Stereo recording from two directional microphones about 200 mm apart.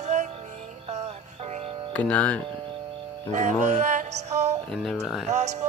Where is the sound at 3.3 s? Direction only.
35° right (ahead or behind).